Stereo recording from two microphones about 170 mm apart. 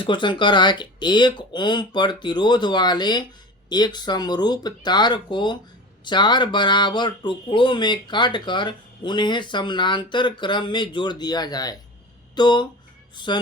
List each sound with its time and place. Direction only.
0.0 s speech: 30° left (ahead or behind)